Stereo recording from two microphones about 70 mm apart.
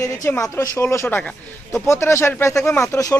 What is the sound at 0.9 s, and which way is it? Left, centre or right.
Speech, left.